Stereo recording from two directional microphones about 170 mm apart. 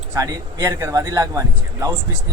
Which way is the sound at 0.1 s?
20° right (ahead or behind).